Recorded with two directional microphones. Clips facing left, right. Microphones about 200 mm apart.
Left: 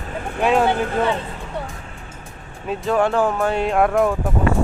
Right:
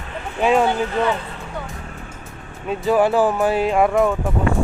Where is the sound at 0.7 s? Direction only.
55° left (ahead or behind).